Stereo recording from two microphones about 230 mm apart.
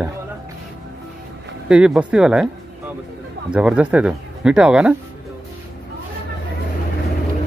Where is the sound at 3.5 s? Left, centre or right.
Centre.